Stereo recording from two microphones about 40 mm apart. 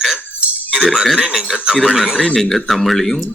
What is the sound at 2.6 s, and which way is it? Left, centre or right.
Speech, centre.